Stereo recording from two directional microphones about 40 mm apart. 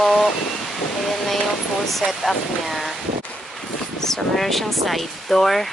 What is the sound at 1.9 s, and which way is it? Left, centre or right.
Speech, centre.